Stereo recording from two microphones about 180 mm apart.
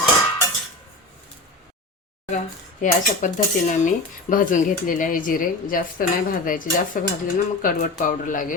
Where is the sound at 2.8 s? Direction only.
45° left (ahead or behind).